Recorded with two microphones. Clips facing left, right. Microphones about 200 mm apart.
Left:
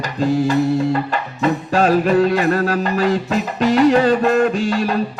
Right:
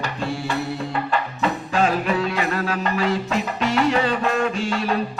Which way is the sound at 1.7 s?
40° left (ahead or behind).